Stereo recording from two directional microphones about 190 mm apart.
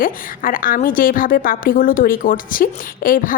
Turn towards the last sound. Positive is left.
turn(degrees=45)  # may be behind; listen again after turning